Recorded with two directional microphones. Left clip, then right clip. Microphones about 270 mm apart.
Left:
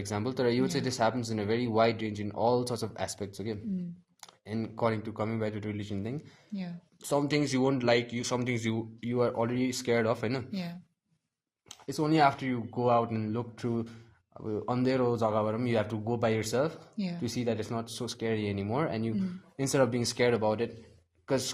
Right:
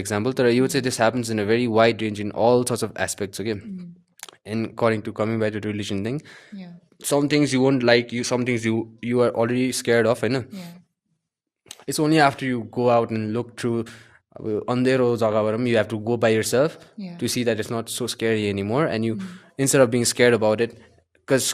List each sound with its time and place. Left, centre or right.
0.0 s speech: right
11.7 s speech: right